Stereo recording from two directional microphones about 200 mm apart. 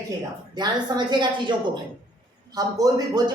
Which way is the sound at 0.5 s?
20° right (ahead or behind).